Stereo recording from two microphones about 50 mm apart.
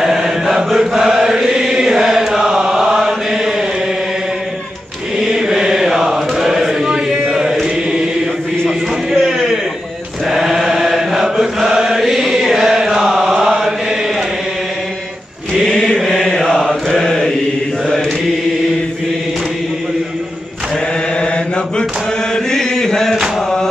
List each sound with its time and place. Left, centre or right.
0.0 s chant: centre
5.1 s chant: centre
8.6 s a sound: centre
10.2 s chant: centre
15.6 s mantra: centre
21.2 s mantra: centre
22.3 s chant: centre